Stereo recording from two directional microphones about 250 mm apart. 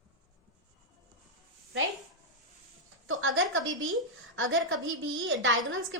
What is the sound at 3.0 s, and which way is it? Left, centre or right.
A woman's voice, right.